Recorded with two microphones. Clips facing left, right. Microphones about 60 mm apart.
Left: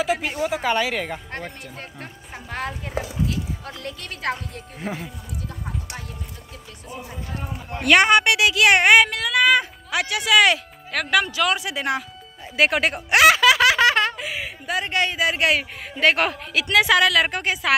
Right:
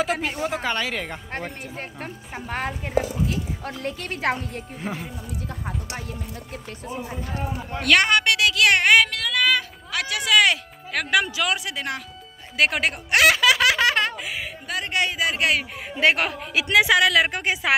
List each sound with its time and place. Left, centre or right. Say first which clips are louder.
0.0 s speech: left 1 dB; centre
1.3 s speech: right 2 dB; centre; by 4.3 s right
4.7 s speech: left 2 dB; centre
7.8 s a woman's voice: left 3 dB; centre
10.0 s speech: left 2 dB; centre
16.0 s a woman's voice: left 1 dB; centre